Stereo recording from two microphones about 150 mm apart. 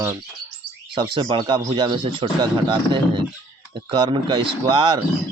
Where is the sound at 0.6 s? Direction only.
75° left (ahead or behind).